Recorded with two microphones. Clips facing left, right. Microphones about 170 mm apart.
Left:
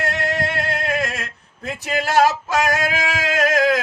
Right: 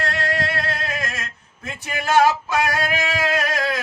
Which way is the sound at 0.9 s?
65° left (ahead or behind).